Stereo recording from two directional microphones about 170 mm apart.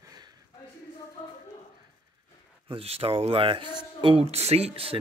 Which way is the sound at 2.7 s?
35° right (ahead or behind).